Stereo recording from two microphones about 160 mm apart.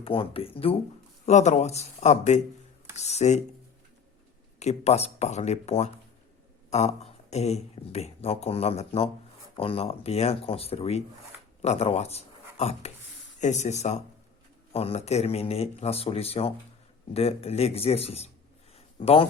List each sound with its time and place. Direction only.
0.0 s speech: 35° left (ahead or behind)
1.2 s speech: 45° left (ahead or behind)
4.6 s speech: 40° left (ahead or behind)